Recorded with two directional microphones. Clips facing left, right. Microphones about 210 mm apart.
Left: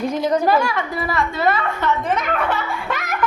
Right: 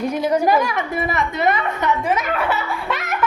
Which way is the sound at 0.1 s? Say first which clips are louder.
Right 1 dB; 10° right (ahead or behind).